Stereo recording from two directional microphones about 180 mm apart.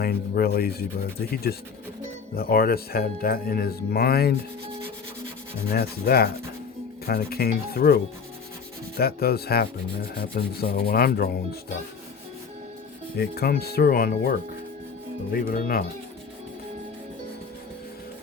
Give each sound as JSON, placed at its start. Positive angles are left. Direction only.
{"t": 0.0, "sound": "rub", "side_deg": 60}
{"t": 5.7, "sound": "rub", "side_deg": 60}
{"t": 9.0, "sound": "rub", "side_deg": 60}
{"t": 13.1, "sound": "rub", "side_deg": 60}
{"t": 15.3, "sound": "speech", "side_deg": 55}